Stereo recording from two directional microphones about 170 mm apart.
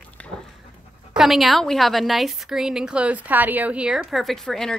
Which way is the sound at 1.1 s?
Centre (ahead or behind).